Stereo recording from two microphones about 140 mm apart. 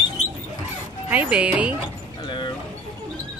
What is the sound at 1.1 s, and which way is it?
Speech, 10° right (ahead or behind).